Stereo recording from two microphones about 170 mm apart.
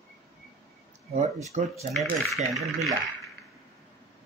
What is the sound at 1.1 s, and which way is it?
Speech, 40° right (ahead or behind).